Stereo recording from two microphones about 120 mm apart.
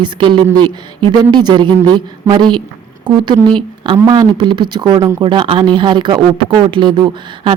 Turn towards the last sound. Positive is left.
turn(degrees=-35)  # may be behind; listen again after turning